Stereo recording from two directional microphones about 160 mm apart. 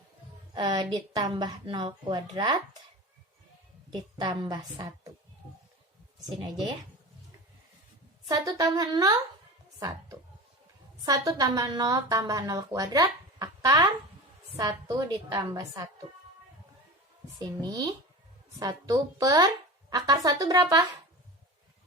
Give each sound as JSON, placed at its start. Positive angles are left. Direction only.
{"t": 0.5, "sound": "a woman's voice", "side_deg": -25}
{"t": 4.2, "sound": "a woman's voice", "side_deg": -25}
{"t": 8.3, "sound": "a woman's voice", "side_deg": -25}
{"t": 11.0, "sound": "a woman's voice", "side_deg": -20}
{"t": 17.6, "sound": "a woman's voice", "side_deg": -25}